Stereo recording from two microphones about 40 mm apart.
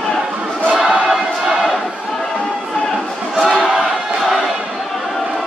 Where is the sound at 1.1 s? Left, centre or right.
Centre.